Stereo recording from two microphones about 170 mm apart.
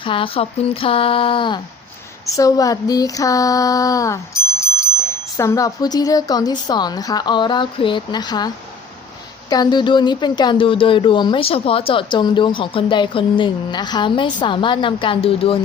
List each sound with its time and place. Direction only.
0.0 s a sound: 30° left (ahead or behind)
5.4 s speech: 20° left (ahead or behind)
9.5 s speech: 25° left (ahead or behind)